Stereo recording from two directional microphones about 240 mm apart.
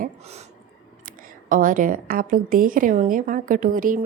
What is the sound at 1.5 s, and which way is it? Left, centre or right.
A woman's voice, right.